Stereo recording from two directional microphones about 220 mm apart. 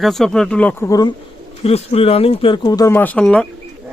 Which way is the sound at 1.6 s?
25° left (ahead or behind).